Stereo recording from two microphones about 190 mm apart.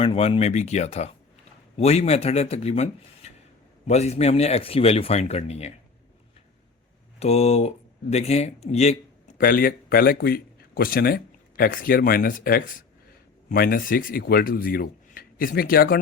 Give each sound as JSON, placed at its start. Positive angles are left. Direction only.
{"t": 0.0, "sound": "speech", "side_deg": 30}
{"t": 7.2, "sound": "a man's voice", "side_deg": 35}
{"t": 9.4, "sound": "speech", "side_deg": 50}